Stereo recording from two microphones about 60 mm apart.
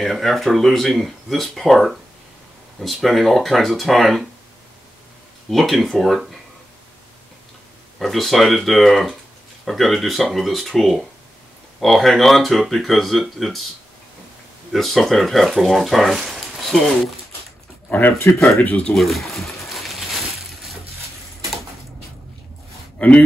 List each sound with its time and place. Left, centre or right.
0.0 s speech: centre
5.5 s speech: centre
8.0 s speech: centre
14.7 s speech: centre
17.8 s speech: left
18.9 s a sound: centre
22.9 s speech: left